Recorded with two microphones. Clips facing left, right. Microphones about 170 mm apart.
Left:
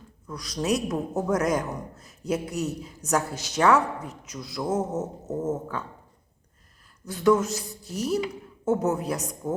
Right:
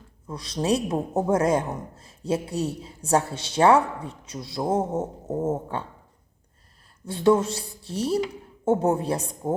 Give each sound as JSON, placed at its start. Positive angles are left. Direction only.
{"t": 0.3, "sound": "speech", "side_deg": -30}
{"t": 7.0, "sound": "speech", "side_deg": -30}